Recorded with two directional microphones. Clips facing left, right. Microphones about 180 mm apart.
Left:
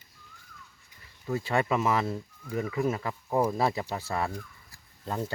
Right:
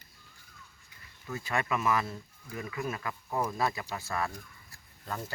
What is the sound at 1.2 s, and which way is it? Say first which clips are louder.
Speech: left 6 dB; 30° left (ahead or behind).